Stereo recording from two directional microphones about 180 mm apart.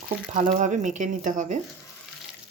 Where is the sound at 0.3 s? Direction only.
35° right (ahead or behind).